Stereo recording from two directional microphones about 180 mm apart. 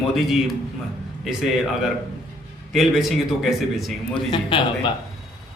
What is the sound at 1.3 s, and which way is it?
Speech, centre (ahead or behind).